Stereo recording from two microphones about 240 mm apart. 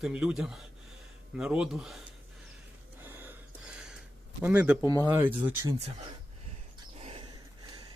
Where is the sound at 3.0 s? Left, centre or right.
Centre.